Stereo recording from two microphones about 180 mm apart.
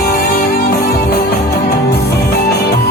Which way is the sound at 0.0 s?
60° left (ahead or behind).